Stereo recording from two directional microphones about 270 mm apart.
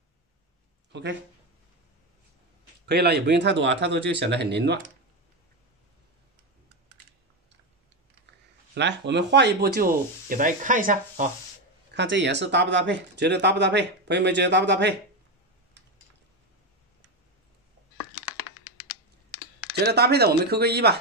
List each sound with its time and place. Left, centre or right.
0.9 s speech: right
2.9 s speech: right
8.7 s speech: right
11.9 s speech: right
19.9 s speech: right